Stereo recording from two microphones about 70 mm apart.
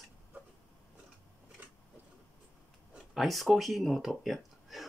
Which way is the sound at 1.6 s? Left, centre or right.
Right.